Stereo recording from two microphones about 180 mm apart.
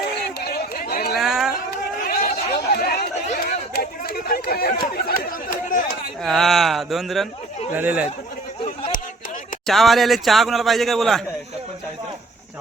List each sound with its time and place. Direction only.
0.3 s a sound: 55° left (ahead or behind)
1.2 s chatter: centre (ahead or behind)
2.0 s chatter: 55° left (ahead or behind)
6.2 s speech: centre (ahead or behind)
9.6 s speech: centre (ahead or behind)